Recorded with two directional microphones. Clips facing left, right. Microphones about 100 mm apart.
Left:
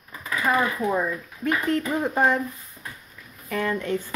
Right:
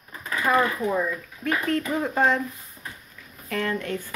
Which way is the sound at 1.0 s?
20° left (ahead or behind).